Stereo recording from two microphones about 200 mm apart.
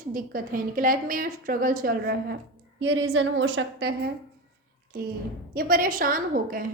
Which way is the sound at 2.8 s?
65° right (ahead or behind).